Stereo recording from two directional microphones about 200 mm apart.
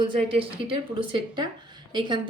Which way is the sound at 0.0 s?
25° right (ahead or behind).